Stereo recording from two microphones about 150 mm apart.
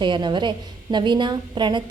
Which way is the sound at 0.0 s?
30° right (ahead or behind).